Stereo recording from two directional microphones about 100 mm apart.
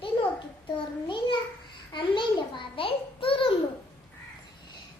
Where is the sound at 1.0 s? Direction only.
55° left (ahead or behind).